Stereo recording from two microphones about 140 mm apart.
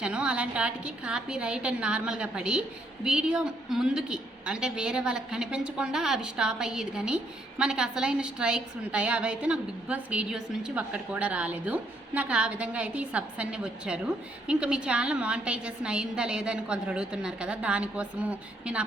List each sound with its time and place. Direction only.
0.0 s a woman's voice: 5° right (ahead or behind)